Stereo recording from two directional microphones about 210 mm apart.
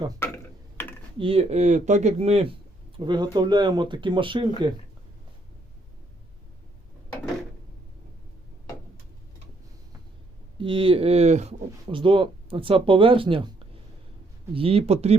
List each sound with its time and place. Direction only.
0.8 s computer keyboard: 10° left (ahead or behind)
1.2 s speech: 25° right (ahead or behind)
10.6 s speech: 25° right (ahead or behind)
14.5 s speech: 25° right (ahead or behind)